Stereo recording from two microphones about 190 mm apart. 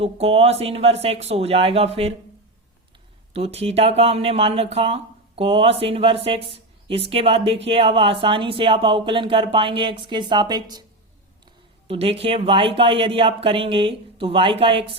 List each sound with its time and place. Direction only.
0.0 s speech: 30° right (ahead or behind)
3.3 s speech: 30° right (ahead or behind)
11.9 s speech: 30° right (ahead or behind)